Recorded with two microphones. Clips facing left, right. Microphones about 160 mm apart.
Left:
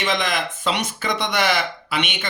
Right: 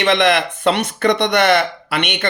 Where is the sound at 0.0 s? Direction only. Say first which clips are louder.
Right 8 dB; 65° right (ahead or behind).